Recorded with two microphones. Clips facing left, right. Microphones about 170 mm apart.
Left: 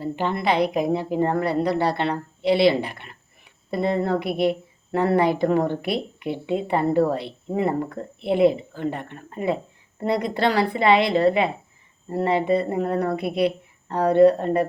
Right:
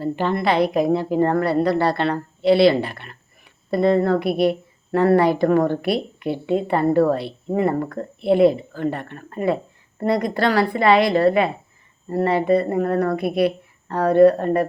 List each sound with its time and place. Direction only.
0.0 s a woman's voice: 15° left (ahead or behind)